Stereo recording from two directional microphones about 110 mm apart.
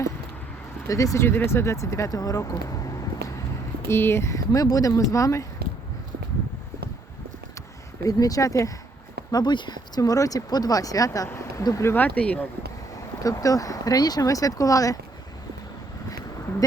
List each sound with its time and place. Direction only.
0.9 s speech: 30° left (ahead or behind)
8.0 s speech: 35° left (ahead or behind)
9.3 s speech: 45° left (ahead or behind); by 12.5 s 15° left (ahead or behind)
13.2 s speech: 30° left (ahead or behind)